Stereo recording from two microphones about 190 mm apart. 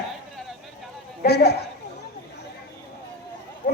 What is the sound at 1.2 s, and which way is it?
Speech, 55° left (ahead or behind).